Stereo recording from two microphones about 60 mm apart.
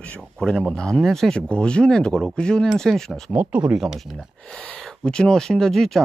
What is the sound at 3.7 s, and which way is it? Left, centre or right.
Speech, centre.